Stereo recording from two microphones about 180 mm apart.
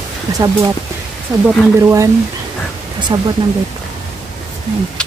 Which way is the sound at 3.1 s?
25° right (ahead or behind).